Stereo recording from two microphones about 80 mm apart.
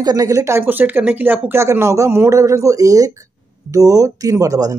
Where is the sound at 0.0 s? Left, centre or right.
Right.